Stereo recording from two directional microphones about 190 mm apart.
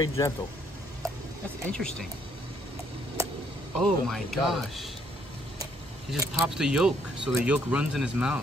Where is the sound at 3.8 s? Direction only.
Centre (ahead or behind).